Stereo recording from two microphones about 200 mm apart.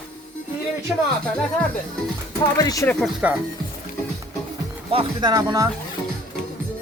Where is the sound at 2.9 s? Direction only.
Centre (ahead or behind).